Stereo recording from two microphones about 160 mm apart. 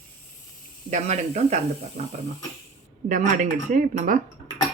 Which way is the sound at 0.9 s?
45° right (ahead or behind).